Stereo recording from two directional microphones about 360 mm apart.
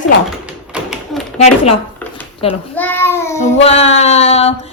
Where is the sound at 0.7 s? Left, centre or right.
Centre.